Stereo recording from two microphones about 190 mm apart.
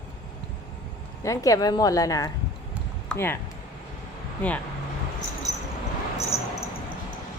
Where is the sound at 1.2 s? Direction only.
15° left (ahead or behind).